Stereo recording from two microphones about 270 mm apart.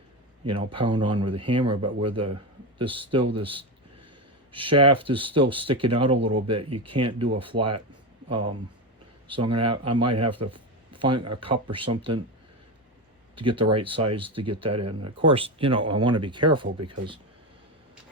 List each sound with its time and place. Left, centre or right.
0.4 s speech: centre
13.3 s speech: centre